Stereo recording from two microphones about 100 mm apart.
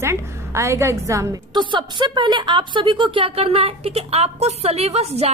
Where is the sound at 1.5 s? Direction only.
50° right (ahead or behind).